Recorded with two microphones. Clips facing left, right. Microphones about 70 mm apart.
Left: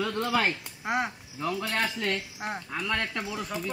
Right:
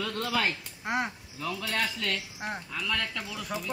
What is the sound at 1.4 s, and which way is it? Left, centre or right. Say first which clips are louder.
Speech: left 2 dB; left.